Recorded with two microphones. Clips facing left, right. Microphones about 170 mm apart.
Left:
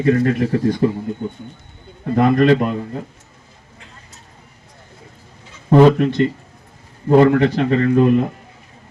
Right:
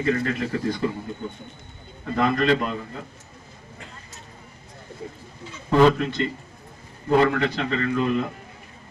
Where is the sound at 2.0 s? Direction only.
50° left (ahead or behind).